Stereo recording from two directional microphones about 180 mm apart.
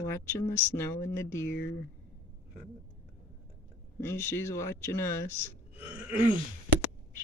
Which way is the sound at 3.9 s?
15° left (ahead or behind).